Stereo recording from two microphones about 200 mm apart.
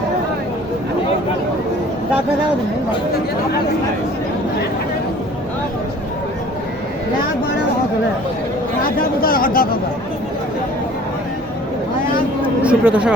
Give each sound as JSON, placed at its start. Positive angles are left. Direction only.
{"t": 9.0, "sound": "speech", "side_deg": 45}
{"t": 12.6, "sound": "speech", "side_deg": -5}